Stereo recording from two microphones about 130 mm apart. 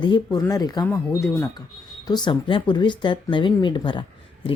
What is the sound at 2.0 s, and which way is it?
Speech, 35° left (ahead or behind).